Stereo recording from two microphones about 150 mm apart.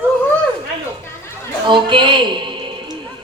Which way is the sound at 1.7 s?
30° right (ahead or behind).